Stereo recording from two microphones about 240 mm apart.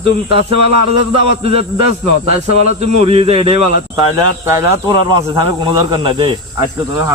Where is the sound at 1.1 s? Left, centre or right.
Right.